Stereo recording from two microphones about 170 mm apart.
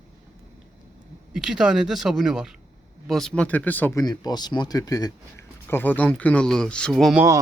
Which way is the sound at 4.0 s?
25° left (ahead or behind).